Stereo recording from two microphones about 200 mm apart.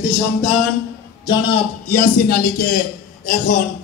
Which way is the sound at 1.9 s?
45° left (ahead or behind).